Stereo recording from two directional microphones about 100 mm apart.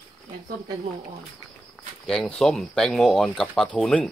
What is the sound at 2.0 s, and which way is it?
Speech, 5° left (ahead or behind).